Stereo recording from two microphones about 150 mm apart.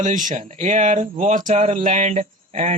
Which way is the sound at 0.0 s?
60° right (ahead or behind).